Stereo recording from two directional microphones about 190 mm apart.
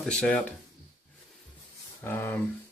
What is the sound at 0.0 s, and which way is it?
Speech, 5° left (ahead or behind).